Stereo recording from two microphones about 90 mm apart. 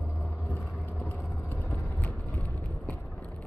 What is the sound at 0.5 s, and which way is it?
Vehicle, 20° left (ahead or behind).